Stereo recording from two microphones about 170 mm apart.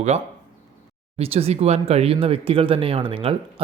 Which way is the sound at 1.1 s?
35° right (ahead or behind).